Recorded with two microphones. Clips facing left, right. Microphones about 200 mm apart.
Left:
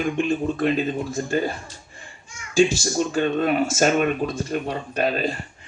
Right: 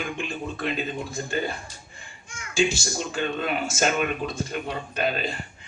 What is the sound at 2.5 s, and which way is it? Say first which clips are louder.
Speech: left 6 dB; 40° left (ahead or behind).